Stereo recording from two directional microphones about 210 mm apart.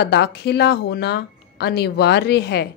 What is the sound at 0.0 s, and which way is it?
Speech, 50° left (ahead or behind).